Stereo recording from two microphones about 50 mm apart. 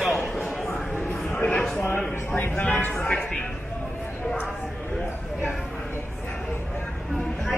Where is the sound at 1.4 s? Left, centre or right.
Left.